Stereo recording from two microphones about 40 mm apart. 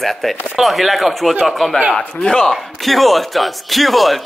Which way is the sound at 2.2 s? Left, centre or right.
Left.